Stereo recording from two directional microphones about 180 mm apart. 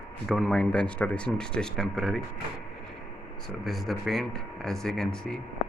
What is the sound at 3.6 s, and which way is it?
Speech, centre (ahead or behind).